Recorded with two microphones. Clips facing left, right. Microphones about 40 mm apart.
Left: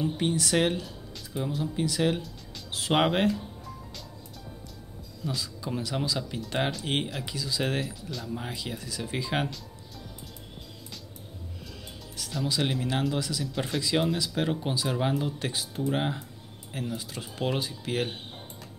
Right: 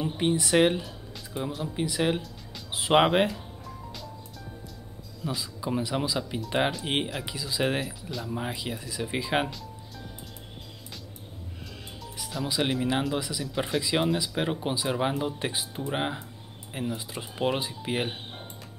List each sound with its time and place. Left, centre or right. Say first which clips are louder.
0.0 s speech: right 1 dB; centre
5.2 s speech: right 1 dB; centre
12.2 s speech: even; centre